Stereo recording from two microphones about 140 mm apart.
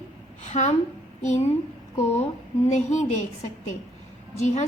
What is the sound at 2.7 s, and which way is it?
Speech, 55° left (ahead or behind).